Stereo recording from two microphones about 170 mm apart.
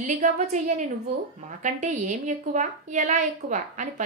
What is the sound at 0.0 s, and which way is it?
A woman's voice, 50° right (ahead or behind).